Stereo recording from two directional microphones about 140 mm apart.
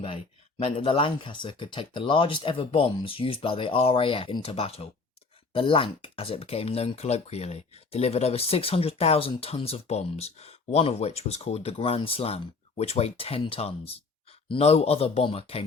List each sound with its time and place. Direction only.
0.6 s speech: 40° left (ahead or behind)